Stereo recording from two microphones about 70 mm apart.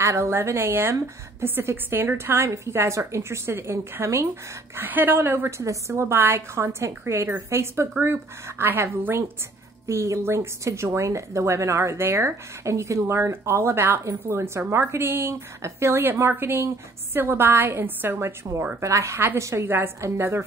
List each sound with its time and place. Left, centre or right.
0.0 s a woman's voice: right
4.7 s a woman's voice: right
5.6 s a woman's voice: right
9.8 s a woman's voice: right
18.8 s a woman's voice: right
19.1 s a woman's voice: right